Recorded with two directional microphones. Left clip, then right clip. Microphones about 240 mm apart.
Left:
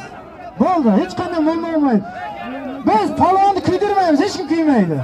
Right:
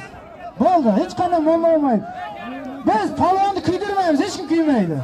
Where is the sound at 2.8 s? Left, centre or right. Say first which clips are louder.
Left 3 dB; left.